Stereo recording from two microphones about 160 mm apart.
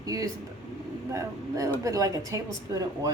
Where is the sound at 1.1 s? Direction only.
20° right (ahead or behind).